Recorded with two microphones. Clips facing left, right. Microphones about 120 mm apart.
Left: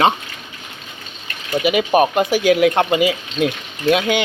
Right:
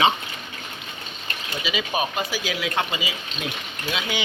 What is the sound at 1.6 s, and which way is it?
Speech, 60° left (ahead or behind).